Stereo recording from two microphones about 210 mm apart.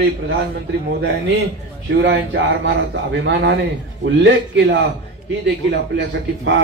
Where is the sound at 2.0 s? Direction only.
60° right (ahead or behind).